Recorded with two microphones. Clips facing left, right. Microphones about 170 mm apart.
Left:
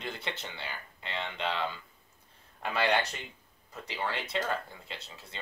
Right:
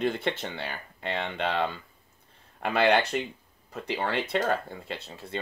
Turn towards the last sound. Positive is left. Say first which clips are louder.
# right 10 dB
turn(degrees=-55)  # may be behind; listen again after turning